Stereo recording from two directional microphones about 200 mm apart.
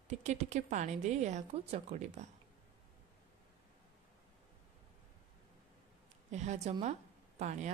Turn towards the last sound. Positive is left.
turn(degrees=-35)  # may be behind; listen again after turning